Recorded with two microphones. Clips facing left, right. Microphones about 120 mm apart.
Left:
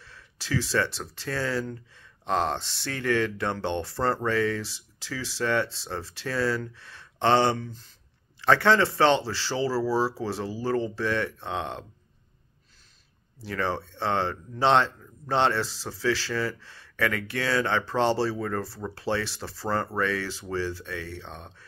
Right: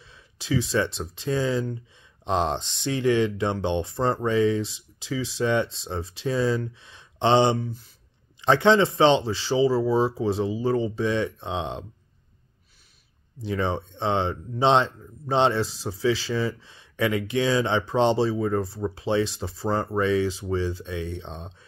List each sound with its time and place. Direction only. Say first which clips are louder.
0.0 s speech: left 1 dB; 15° right (ahead or behind)
13.4 s speech: right 3 dB; 20° right (ahead or behind)